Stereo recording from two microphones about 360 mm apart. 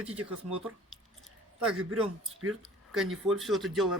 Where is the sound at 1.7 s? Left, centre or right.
Right.